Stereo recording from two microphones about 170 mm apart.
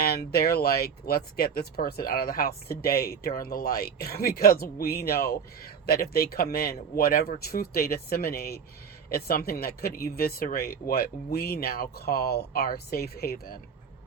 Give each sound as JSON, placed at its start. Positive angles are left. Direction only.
{"t": 0.0, "sound": "speech", "side_deg": 65}